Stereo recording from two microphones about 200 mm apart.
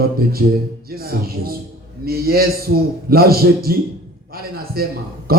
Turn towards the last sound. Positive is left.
turn(degrees=-50)  # may be behind; listen again after turning